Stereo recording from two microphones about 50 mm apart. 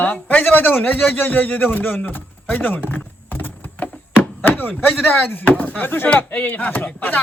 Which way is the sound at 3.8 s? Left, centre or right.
Left.